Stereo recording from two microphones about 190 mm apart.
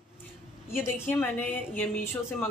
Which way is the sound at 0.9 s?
10° left (ahead or behind).